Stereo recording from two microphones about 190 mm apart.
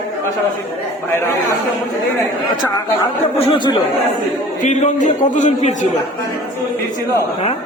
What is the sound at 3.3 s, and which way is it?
Speech, 25° left (ahead or behind).